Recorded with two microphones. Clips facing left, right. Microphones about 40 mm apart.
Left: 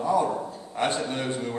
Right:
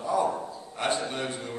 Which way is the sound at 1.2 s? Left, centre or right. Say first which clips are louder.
Left 5 dB; left.